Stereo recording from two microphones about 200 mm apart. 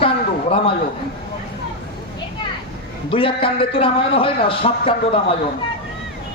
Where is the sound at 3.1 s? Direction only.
25° left (ahead or behind).